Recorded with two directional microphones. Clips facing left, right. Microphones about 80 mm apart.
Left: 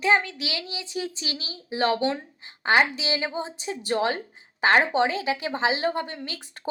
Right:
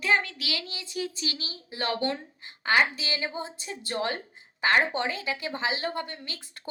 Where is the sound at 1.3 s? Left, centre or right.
Right.